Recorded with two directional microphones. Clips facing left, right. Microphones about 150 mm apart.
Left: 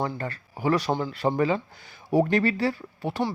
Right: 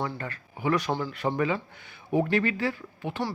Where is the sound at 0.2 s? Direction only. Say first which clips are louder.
Left 4 dB; 35° left (ahead or behind).